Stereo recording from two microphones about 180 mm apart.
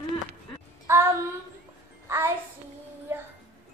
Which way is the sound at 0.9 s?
15° right (ahead or behind).